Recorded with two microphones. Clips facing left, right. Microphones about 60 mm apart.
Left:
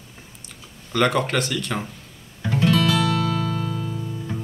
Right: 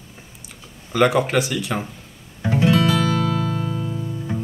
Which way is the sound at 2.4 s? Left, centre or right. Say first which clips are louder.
Right 2 dB; centre.